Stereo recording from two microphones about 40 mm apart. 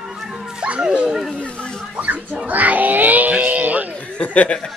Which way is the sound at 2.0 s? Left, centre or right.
Right.